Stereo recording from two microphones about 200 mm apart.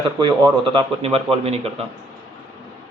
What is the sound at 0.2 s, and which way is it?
A man's voice, 25° right (ahead or behind).